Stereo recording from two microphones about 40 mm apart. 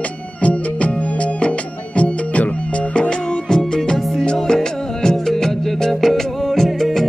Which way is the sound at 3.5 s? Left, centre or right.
Centre.